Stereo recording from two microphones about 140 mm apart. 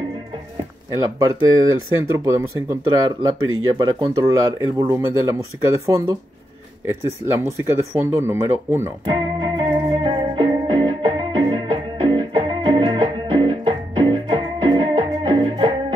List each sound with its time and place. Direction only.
1.2 s speech: 25° right (ahead or behind)
7.3 s speech: 20° right (ahead or behind)
9.0 s music: 35° right (ahead or behind)